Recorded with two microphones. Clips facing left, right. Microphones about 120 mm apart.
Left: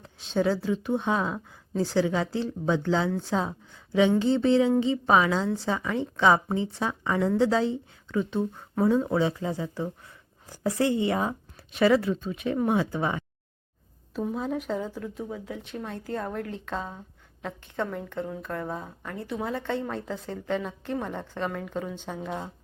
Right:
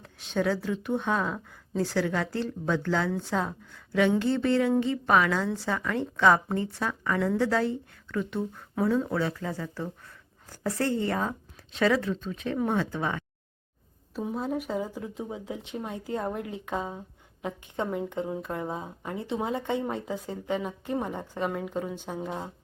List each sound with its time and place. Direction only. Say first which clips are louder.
0.0 s speech: left 2 dB; 15° left (ahead or behind)
14.1 s a woman's voice: left 1 dB; 5° right (ahead or behind)